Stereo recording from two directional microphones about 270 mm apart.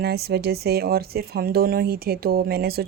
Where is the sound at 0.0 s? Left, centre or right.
Right.